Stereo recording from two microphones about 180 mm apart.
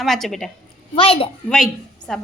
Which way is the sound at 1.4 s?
5° left (ahead or behind).